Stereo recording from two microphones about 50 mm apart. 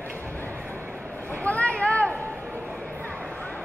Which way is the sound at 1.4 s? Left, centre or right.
Left.